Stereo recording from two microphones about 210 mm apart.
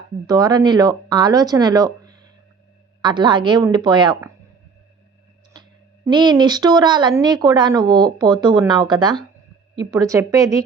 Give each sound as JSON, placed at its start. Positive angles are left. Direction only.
{"t": 0.3, "sound": "a woman's voice", "side_deg": -15}
{"t": 6.1, "sound": "a woman's voice", "side_deg": -20}